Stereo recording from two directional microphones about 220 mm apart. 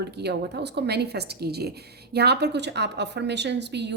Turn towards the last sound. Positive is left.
turn(degrees=-50)  # may be behind; listen again after turning